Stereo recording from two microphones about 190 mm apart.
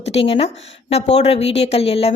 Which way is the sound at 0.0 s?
30° left (ahead or behind).